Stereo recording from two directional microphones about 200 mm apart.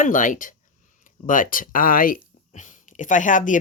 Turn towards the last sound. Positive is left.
turn(degrees=40)  # may be behind; listen again after turning